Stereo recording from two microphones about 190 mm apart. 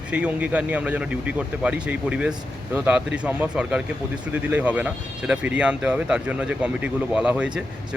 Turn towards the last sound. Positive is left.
turn(degrees=-5)  # may be behind; listen again after turning